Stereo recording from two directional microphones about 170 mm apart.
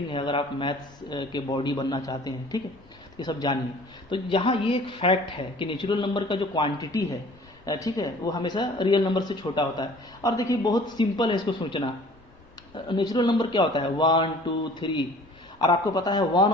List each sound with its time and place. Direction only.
0.1 s speech: 30° left (ahead or behind)
12.9 s speech: 25° left (ahead or behind)